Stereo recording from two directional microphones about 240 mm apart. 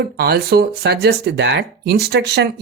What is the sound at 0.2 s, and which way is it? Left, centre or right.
Speech, right.